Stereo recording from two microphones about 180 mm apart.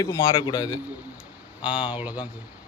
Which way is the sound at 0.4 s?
25° left (ahead or behind).